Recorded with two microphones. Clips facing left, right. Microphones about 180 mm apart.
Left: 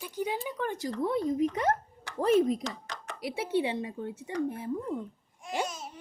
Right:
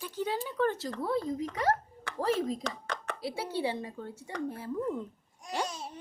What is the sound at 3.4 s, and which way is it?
Speech, 20° left (ahead or behind).